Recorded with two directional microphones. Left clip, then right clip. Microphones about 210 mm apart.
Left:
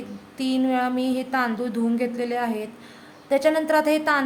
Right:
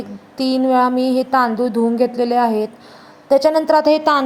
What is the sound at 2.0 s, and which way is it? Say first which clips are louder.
Speech: right 12 dB; 30° right (ahead or behind).